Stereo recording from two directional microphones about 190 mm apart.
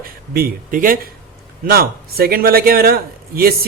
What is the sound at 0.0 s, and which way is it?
A man's voice, 50° right (ahead or behind).